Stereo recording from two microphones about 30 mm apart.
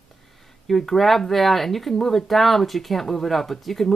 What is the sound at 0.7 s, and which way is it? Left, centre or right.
Speech, centre.